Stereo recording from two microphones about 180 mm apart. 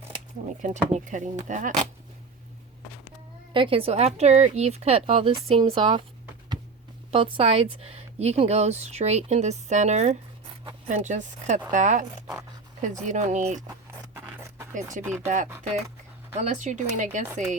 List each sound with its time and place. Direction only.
0.6 s speech: 45° right (ahead or behind)
3.5 s speech: 30° right (ahead or behind)
7.1 s speech: 30° right (ahead or behind)
14.1 s a sound: 15° right (ahead or behind)
15.0 s speech: 15° right (ahead or behind)
16.4 s speech: 40° right (ahead or behind)